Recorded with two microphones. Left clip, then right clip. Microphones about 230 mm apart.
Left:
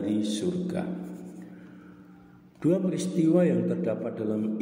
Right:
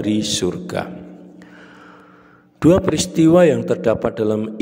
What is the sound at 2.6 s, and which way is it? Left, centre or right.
A man's voice, right.